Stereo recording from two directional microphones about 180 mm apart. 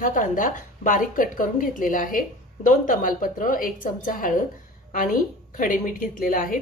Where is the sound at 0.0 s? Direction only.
45° left (ahead or behind).